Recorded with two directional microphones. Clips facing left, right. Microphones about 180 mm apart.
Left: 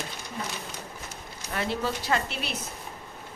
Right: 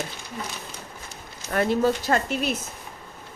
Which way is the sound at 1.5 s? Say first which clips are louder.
Right 8 dB; 45° right (ahead or behind).